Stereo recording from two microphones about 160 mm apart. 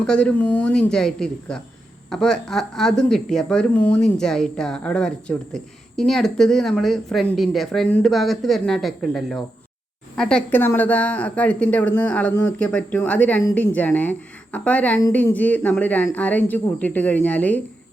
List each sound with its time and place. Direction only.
0.0 s speech: 5° left (ahead or behind)